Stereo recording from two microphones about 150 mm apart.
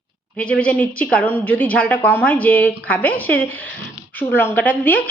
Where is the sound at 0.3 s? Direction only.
10° left (ahead or behind).